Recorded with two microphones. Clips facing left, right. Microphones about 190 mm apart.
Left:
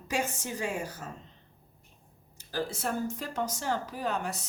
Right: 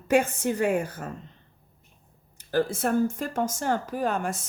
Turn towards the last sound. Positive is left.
turn(degrees=-50)  # may be behind; listen again after turning